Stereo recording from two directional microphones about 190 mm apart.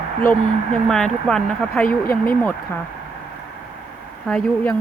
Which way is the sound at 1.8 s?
50° left (ahead or behind).